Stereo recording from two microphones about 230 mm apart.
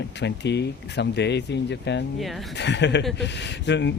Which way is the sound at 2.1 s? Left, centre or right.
Centre.